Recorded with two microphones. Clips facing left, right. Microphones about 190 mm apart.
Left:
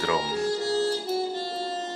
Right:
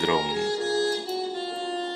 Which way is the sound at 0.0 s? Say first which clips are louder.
Right 2 dB; 15° right (ahead or behind).